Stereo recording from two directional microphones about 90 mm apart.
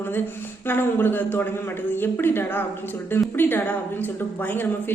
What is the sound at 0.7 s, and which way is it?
A woman's voice, 25° left (ahead or behind).